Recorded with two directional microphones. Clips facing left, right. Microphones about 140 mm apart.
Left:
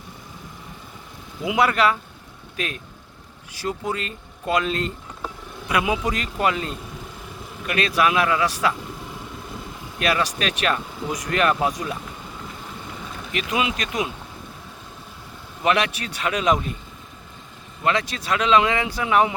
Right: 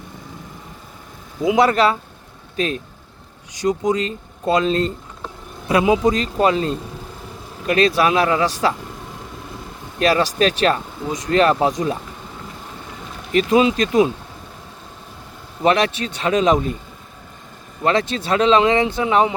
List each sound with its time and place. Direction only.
1.5 s speech: 30° right (ahead or behind)
3.6 s speech: 20° right (ahead or behind)
10.0 s speech: 35° right (ahead or behind)
13.3 s speech: 35° right (ahead or behind)
15.6 s speech: 35° right (ahead or behind)
17.8 s speech: 30° right (ahead or behind)